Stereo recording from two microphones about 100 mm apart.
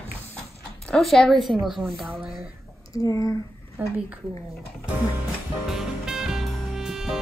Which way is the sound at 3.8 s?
15° right (ahead or behind).